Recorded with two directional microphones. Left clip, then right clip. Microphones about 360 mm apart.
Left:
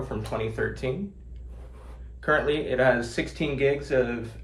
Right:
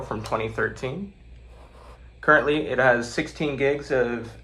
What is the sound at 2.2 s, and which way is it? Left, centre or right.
Speech, centre.